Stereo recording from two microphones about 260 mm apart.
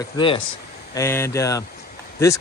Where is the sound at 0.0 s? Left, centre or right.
Centre.